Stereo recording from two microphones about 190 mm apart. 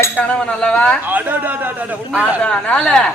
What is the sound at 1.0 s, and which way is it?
A man's voice, 10° right (ahead or behind).